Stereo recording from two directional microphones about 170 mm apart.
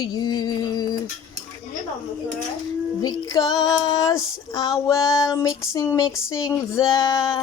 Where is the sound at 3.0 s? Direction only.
20° left (ahead or behind).